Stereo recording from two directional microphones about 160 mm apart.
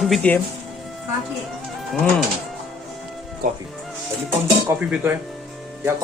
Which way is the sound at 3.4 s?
55° right (ahead or behind).